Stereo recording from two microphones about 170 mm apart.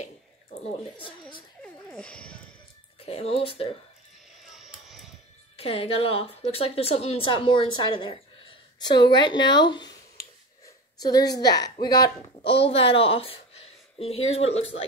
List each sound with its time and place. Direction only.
1.6 s a sound: 5° left (ahead or behind)
3.1 s speech: 35° left (ahead or behind)
4.4 s vehicle: centre (ahead or behind)
5.6 s a woman's voice: 35° left (ahead or behind)
12.6 s speech: 35° left (ahead or behind)